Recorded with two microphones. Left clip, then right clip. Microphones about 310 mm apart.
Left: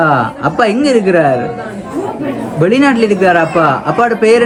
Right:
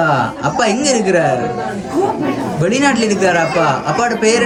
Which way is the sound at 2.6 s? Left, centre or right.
Centre.